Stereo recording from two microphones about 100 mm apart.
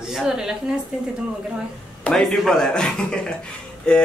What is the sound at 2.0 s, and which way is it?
Speech, 5° left (ahead or behind).